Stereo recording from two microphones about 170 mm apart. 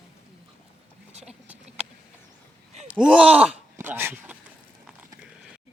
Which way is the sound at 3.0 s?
5° right (ahead or behind).